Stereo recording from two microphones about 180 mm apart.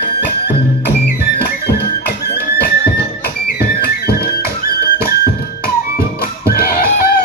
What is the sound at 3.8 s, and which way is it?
Music, 60° left (ahead or behind).